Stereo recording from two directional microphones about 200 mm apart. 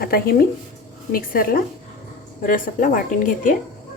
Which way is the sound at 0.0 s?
45° left (ahead or behind).